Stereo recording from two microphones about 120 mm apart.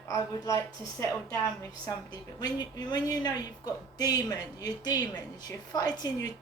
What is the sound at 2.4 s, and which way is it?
A woman's voice, 35° left (ahead or behind).